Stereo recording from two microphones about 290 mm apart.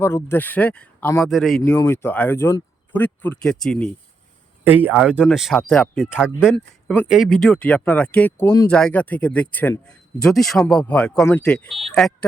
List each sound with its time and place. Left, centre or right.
0.0 s speech: centre